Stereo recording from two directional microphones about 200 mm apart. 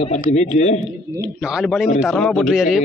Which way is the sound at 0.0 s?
35° left (ahead or behind).